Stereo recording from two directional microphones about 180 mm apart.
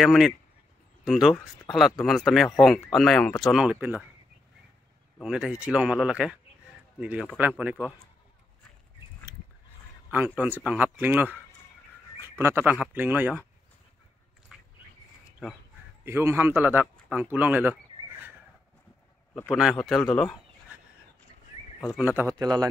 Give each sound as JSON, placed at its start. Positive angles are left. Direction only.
{"t": 0.0, "sound": "speech", "side_deg": 0}
{"t": 5.2, "sound": "speech", "side_deg": -5}
{"t": 10.4, "sound": "speech", "side_deg": -10}
{"t": 14.5, "sound": "a sound", "side_deg": -5}
{"t": 16.1, "sound": "speech", "side_deg": -15}
{"t": 17.1, "sound": "a sound", "side_deg": -10}
{"t": 19.5, "sound": "speech", "side_deg": 0}
{"t": 21.9, "sound": "speech", "side_deg": -10}
{"t": 22.4, "sound": "speech", "side_deg": -20}